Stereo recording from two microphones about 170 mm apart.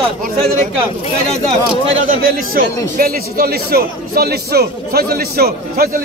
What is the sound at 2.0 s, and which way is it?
A man's voice, 55° right (ahead or behind).